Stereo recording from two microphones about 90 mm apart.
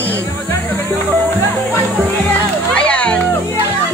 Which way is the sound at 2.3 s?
15° left (ahead or behind).